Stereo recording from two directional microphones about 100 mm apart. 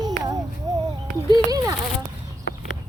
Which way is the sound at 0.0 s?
40° right (ahead or behind).